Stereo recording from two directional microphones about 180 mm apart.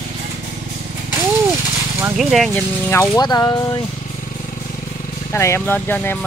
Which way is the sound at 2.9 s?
20° left (ahead or behind).